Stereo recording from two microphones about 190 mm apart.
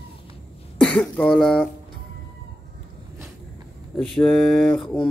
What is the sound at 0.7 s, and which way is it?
Speech, 5° left (ahead or behind).